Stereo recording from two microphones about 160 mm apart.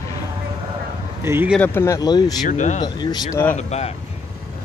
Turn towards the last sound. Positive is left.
turn(degrees=40)  # may be behind; listen again after turning